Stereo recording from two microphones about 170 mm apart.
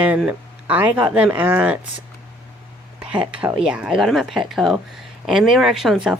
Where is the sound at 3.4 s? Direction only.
5° right (ahead or behind).